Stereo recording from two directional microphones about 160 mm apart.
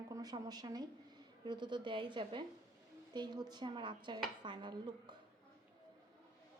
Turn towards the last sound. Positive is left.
turn(degrees=-30)  # may be behind; listen again after turning